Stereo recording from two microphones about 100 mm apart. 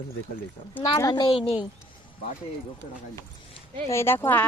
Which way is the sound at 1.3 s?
75° left (ahead or behind).